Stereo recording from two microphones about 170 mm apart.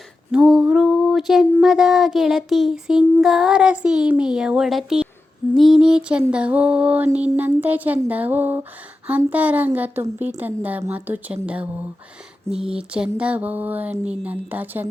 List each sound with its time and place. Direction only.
0.3 s a sound: 5° right (ahead or behind)
5.5 s a woman's voice: centre (ahead or behind)
13.9 s speech: 40° right (ahead or behind)
14.3 s a woman's voice: 10° right (ahead or behind)